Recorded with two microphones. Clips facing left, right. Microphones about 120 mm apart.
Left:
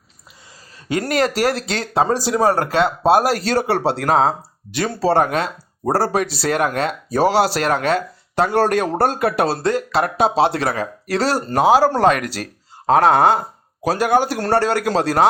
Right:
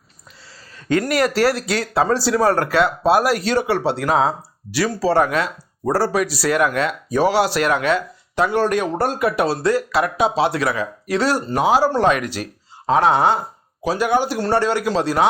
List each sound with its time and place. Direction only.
1.0 s speech: 30° left (ahead or behind)
1.3 s speech: 15° left (ahead or behind)
1.5 s speech: 25° left (ahead or behind)
11.4 s speech: 45° left (ahead or behind)